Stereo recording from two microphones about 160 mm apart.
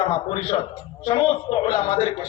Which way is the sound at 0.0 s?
35° left (ahead or behind).